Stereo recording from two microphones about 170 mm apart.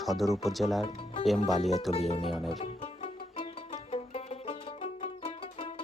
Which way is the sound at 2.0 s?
35° left (ahead or behind).